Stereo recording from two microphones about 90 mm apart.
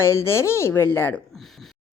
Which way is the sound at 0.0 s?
30° left (ahead or behind).